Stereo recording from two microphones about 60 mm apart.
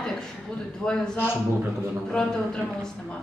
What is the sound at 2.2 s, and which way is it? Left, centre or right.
Speech, centre.